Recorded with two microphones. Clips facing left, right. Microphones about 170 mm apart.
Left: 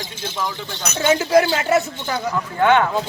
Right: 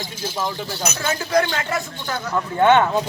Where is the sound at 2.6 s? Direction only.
20° right (ahead or behind).